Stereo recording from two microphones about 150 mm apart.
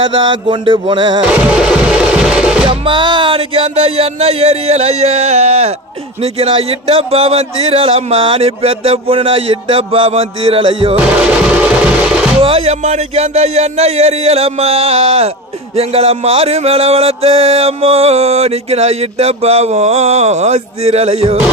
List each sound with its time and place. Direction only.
0.1 s speech: 30° right (ahead or behind)
1.5 s music: 5° right (ahead or behind)
2.6 s music: 35° right (ahead or behind)
6.2 s speech: 40° right (ahead or behind)
11.2 s music: 5° right (ahead or behind)
12.4 s music: 40° right (ahead or behind)